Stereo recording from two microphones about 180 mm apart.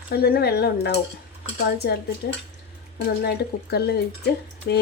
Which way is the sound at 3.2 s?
65° left (ahead or behind).